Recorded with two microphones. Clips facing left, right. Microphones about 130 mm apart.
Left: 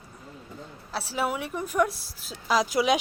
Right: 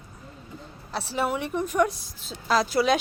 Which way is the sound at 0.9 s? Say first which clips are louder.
Right 2 dB; 5° left (ahead or behind).